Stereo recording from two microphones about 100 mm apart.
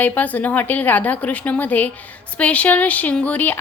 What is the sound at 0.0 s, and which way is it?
A woman's voice, 15° left (ahead or behind).